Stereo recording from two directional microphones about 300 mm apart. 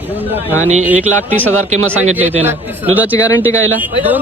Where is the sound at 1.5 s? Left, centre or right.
Right.